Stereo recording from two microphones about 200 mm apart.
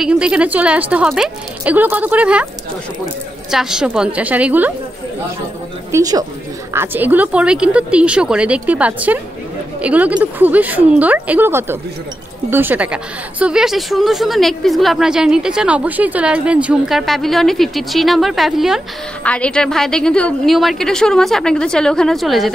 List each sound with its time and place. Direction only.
0.0 s speech: 5° right (ahead or behind)
3.5 s speech: 5° right (ahead or behind)
5.9 s a woman's voice: 15° right (ahead or behind); by 22.5 s centre (ahead or behind)